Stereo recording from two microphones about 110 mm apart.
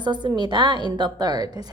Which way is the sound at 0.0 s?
45° right (ahead or behind).